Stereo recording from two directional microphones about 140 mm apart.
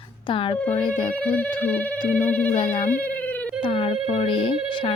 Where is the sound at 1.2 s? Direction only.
10° left (ahead or behind).